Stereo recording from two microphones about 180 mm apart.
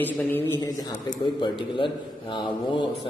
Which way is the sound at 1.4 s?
25° left (ahead or behind).